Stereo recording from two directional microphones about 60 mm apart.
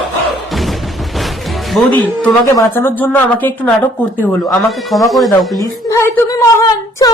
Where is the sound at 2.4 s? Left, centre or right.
Left.